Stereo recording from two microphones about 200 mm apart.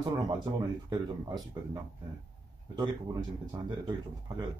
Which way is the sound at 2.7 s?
20° right (ahead or behind).